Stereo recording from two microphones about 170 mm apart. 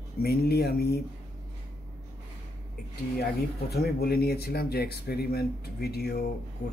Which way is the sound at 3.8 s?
65° left (ahead or behind).